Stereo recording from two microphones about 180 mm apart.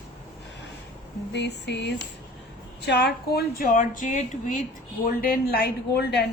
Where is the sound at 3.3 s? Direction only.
55° left (ahead or behind).